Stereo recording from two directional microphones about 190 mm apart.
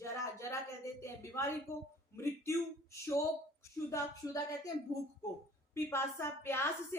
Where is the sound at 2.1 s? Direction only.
15° left (ahead or behind).